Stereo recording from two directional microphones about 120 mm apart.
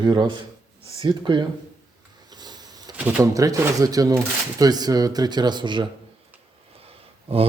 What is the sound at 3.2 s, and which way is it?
A man's voice, 25° right (ahead or behind).